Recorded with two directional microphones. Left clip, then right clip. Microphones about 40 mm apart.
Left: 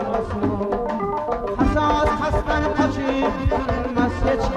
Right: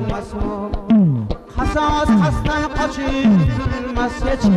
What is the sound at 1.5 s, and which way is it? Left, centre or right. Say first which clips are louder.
Music: right 3 dB; left.